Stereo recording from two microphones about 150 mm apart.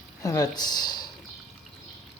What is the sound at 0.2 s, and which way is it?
Speech, 25° left (ahead or behind).